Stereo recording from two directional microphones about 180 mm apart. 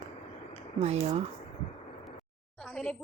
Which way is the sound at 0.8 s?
35° right (ahead or behind).